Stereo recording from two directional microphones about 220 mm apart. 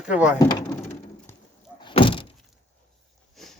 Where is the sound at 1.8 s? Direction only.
20° left (ahead or behind).